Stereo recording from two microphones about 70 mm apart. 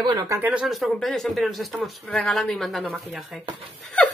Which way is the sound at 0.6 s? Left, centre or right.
Centre.